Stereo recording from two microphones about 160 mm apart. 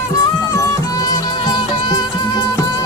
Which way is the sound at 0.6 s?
25° left (ahead or behind).